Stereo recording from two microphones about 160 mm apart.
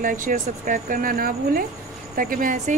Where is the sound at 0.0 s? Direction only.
55° right (ahead or behind).